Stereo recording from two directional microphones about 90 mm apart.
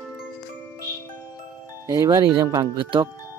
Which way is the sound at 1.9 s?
40° right (ahead or behind).